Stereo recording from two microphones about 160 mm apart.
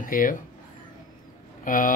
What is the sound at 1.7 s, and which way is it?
Speech, 60° left (ahead or behind).